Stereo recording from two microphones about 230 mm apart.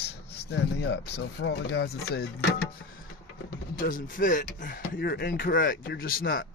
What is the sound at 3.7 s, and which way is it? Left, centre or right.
Speech, left.